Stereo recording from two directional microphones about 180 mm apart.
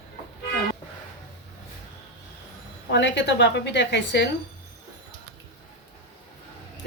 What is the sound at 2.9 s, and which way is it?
Speech, 80° left.